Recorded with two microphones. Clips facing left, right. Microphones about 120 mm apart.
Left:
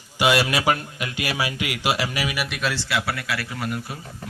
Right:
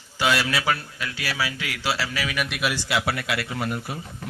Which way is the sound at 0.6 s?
20° left (ahead or behind).